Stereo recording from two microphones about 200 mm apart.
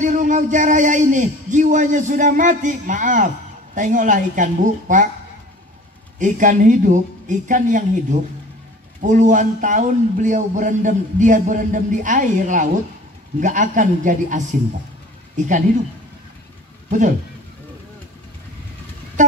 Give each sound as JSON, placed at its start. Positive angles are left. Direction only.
{"t": 0.0, "sound": "speech", "side_deg": -40}
{"t": 6.1, "sound": "speech", "side_deg": -40}
{"t": 19.2, "sound": "a sound", "side_deg": -40}